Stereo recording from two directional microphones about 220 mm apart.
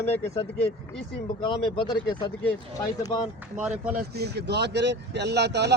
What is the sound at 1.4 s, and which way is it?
Speech, 20° left (ahead or behind).